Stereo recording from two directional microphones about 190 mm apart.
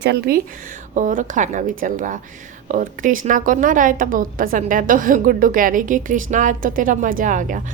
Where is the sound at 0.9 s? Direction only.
40° right (ahead or behind).